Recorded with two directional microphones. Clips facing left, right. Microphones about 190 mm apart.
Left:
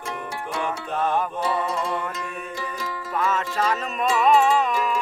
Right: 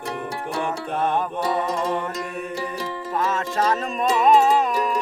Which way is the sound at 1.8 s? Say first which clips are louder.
Right 3 dB; 40° right (ahead or behind).